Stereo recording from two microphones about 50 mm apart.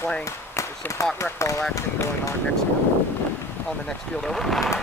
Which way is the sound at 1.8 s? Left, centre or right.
Left.